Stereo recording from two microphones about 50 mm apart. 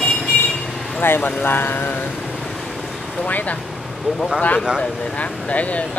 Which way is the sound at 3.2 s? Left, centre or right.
Left.